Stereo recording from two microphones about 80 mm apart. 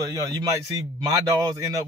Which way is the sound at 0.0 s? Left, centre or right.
Right.